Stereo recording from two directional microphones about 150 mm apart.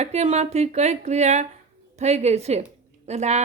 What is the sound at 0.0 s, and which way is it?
A woman's voice, 45° right (ahead or behind).